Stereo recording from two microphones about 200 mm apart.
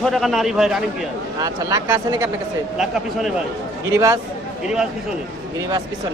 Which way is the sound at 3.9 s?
20° right (ahead or behind).